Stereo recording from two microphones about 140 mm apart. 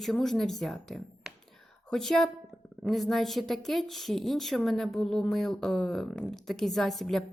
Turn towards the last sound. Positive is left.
turn(degrees=0)  # may be behind; listen again after turning